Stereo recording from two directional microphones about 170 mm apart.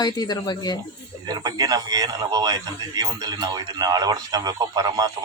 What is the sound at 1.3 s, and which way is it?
A man's voice, 20° right (ahead or behind).